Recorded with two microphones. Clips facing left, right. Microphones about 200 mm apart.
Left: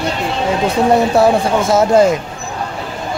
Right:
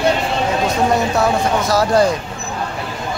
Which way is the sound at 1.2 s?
25° left (ahead or behind).